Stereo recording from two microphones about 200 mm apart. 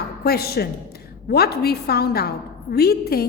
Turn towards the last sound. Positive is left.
turn(degrees=50)  # may be behind; listen again after turning